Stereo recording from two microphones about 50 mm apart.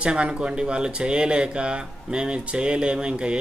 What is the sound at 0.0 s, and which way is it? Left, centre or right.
Speech, centre.